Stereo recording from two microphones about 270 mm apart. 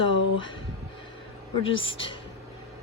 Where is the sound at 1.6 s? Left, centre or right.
Centre.